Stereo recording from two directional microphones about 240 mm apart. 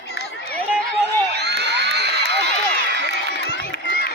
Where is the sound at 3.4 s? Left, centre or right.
Left.